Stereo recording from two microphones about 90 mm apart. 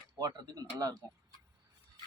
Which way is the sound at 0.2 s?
45° right (ahead or behind).